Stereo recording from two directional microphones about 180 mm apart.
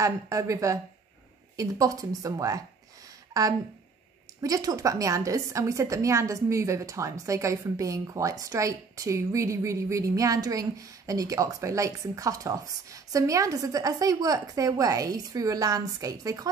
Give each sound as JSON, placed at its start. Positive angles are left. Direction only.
{"t": 0.0, "sound": "a woman's voice", "side_deg": -15}
{"t": 4.4, "sound": "a woman's voice", "side_deg": -20}